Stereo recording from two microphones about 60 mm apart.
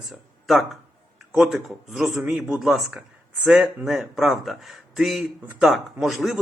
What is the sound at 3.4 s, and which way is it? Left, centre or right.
Speech, centre.